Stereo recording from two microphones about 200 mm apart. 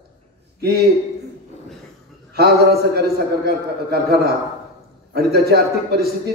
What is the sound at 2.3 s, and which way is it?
A man's voice, 50° right (ahead or behind).